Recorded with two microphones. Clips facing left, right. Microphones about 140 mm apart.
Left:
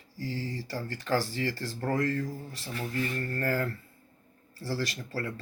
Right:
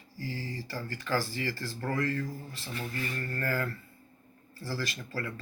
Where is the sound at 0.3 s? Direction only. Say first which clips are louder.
Left 3 dB; 40° left (ahead or behind).